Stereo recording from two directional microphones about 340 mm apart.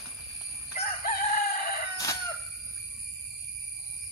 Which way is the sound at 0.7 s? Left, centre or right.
Left.